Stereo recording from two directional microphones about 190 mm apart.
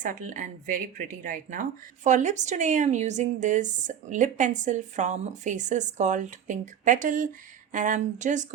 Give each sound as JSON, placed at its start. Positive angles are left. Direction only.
{"t": 0.0, "sound": "a woman's voice", "side_deg": -45}